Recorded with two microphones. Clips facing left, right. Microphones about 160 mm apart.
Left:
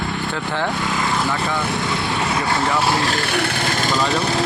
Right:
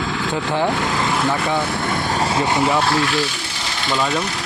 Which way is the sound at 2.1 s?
30° right (ahead or behind).